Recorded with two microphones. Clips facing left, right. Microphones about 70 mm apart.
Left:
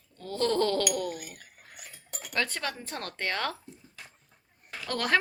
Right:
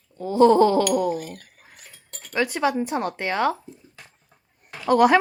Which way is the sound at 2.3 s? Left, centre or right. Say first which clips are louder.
Right 10 dB; centre.